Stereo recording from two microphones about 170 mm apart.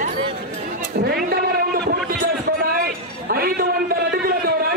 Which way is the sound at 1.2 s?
60° right (ahead or behind).